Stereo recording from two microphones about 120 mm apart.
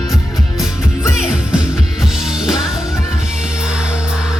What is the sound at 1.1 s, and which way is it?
Music, 5° right (ahead or behind).